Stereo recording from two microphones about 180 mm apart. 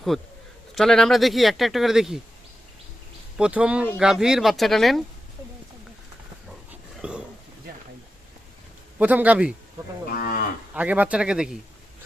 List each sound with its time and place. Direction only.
0.1 s speech: centre (ahead or behind)
3.3 s speech: 5° right (ahead or behind)
6.7 s dog: 5° right (ahead or behind)
9.0 s speech: 10° right (ahead or behind)
10.1 s moo: 55° left (ahead or behind)
10.8 s speech: 10° right (ahead or behind)